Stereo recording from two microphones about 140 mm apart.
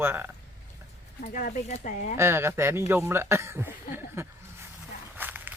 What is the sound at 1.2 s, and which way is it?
Speech, 70° left (ahead or behind).